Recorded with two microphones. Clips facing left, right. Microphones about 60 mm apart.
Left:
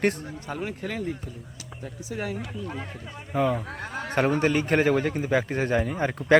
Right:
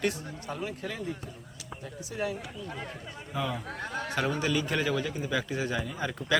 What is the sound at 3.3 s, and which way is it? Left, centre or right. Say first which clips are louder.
Speech: left 8 dB; left.